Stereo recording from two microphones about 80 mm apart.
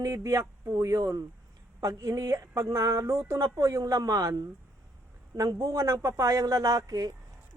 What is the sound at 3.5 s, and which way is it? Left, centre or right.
A woman's voice, right.